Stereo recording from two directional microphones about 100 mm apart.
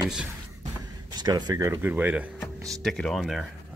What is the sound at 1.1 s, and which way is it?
Speech, 45° right (ahead or behind).